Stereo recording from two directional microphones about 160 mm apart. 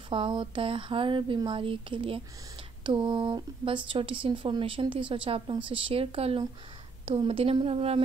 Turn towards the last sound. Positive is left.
turn(degrees=-40)  # may be behind; listen again after turning